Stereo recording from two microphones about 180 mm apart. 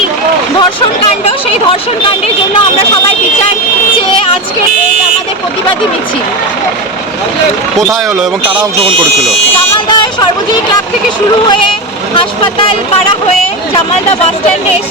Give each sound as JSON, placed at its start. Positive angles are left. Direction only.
{"t": 1.2, "sound": "speech", "side_deg": 30}
{"t": 9.9, "sound": "speech", "side_deg": 25}